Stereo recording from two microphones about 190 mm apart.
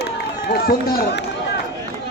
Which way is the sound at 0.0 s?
60° left (ahead or behind).